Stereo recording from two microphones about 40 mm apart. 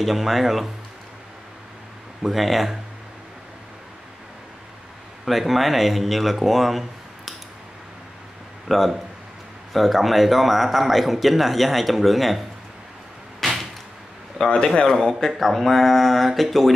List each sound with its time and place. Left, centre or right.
0.0 s speech: centre
2.2 s speech: centre
5.2 s speech: centre
8.6 s speech: centre
13.4 s door: centre
14.4 s a man's voice: centre
15.3 s speech: centre